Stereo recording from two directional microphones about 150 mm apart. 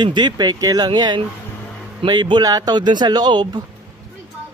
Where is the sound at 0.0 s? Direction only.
30° right (ahead or behind).